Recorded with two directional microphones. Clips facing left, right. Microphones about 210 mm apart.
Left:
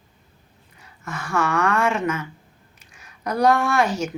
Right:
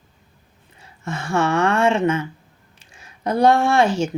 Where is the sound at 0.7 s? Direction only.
25° right (ahead or behind).